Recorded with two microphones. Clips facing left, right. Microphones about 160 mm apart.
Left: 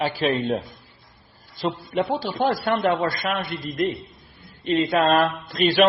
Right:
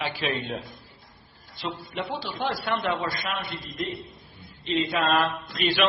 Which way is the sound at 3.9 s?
Centre (ahead or behind).